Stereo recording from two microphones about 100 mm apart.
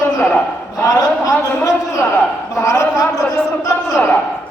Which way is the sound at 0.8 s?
35° left (ahead or behind).